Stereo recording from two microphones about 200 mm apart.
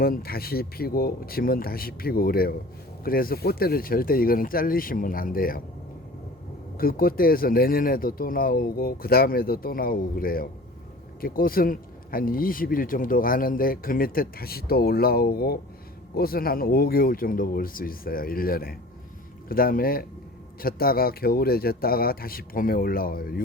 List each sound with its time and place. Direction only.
0.0 s speech: 50° left (ahead or behind)
6.7 s speech: 45° left (ahead or behind)